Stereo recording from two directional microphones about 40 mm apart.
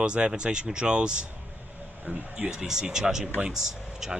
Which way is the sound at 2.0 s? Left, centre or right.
Right.